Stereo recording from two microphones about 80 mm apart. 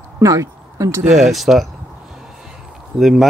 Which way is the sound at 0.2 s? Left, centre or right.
Right.